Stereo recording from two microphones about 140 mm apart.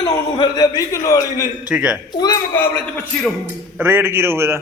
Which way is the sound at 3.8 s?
15° right (ahead or behind).